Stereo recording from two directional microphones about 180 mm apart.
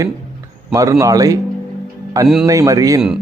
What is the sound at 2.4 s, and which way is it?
Speech, 20° right (ahead or behind).